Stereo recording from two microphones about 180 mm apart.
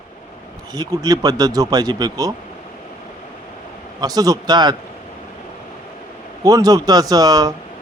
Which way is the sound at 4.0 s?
20° right (ahead or behind).